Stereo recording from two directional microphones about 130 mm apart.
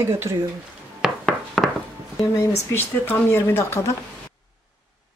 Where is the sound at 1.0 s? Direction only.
Centre (ahead or behind).